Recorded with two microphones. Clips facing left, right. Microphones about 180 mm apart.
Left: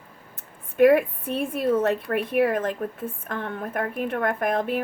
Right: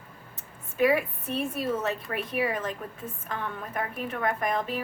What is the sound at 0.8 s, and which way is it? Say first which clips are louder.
Speech: left 7 dB; 55° left (ahead or behind).